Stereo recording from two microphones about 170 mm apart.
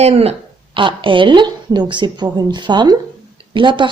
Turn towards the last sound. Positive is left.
turn(degrees=-30)  # may be behind; listen again after turning